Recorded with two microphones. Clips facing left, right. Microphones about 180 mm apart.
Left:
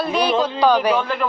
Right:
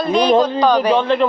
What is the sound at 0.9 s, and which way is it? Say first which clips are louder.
Speech: right 6 dB; 25° right (ahead or behind).